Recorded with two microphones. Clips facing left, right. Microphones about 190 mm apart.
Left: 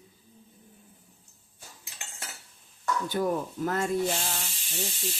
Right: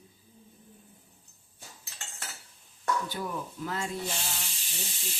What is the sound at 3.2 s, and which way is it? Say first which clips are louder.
Speech: left 8 dB; 50° left (ahead or behind).